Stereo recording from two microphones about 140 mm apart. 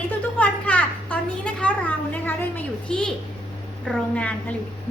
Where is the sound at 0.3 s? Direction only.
10° left (ahead or behind).